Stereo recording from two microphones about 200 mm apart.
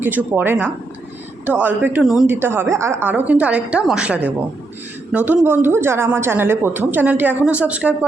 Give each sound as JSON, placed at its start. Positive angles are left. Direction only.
{"t": 0.0, "sound": "a woman's voice", "side_deg": -10}